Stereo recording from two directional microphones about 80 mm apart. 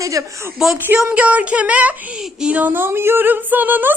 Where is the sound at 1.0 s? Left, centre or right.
Centre.